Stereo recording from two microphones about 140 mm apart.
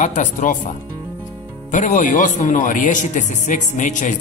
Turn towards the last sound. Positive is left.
turn(degrees=65)  # may be behind; listen again after turning